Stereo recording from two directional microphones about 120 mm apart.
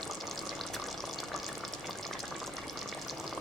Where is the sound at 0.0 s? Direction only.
Centre (ahead or behind).